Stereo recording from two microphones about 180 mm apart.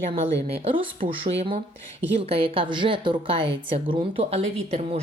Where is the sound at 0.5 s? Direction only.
30° right (ahead or behind).